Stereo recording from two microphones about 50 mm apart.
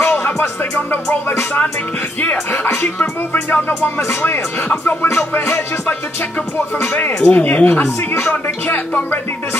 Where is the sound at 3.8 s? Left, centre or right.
Left.